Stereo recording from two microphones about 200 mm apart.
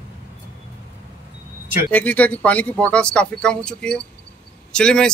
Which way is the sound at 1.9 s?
5° left (ahead or behind).